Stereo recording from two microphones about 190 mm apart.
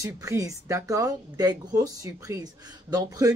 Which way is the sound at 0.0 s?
15° right (ahead or behind).